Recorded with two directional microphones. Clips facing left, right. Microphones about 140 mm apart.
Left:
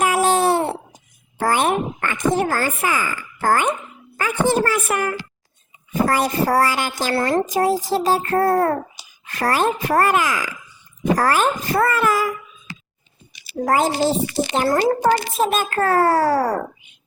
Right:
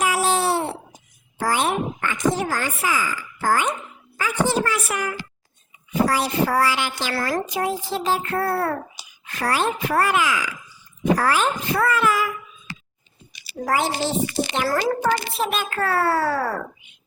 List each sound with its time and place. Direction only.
0.0 s babbling: 50° left (ahead or behind)
1.4 s a sound: 55° left (ahead or behind)
2.6 s a child's voice: 50° left (ahead or behind)
7.1 s a woman's voice: 30° left (ahead or behind)
7.4 s a child's voice: 40° left (ahead or behind)
13.7 s a child's voice: 40° left (ahead or behind)